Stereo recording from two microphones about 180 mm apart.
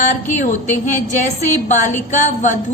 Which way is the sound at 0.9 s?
45° left (ahead or behind).